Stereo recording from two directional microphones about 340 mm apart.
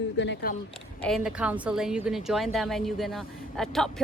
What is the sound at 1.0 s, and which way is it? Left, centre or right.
A woman's voice, centre.